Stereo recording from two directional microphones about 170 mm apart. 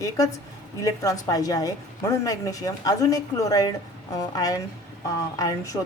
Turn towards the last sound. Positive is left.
turn(degrees=20)  # may be behind; listen again after turning